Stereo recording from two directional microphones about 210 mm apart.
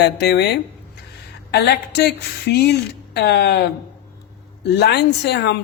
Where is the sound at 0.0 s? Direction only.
50° left (ahead or behind).